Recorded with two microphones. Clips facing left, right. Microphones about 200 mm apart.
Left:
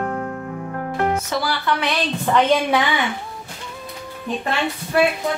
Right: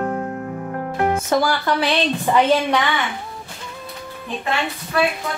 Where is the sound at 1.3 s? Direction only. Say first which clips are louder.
Right 4 dB; 45° right (ahead or behind).